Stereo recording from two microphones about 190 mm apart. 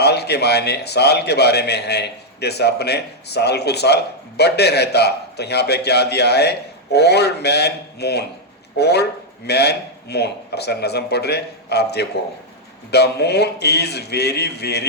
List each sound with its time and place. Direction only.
0.0 s a man's voice: 60° left (ahead or behind)